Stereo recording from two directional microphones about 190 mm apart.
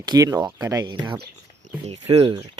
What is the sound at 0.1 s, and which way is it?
Speech, 20° right (ahead or behind).